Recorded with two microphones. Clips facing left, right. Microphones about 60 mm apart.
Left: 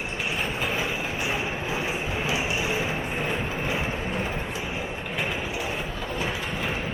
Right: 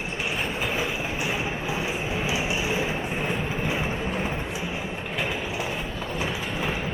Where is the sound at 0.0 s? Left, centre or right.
Centre.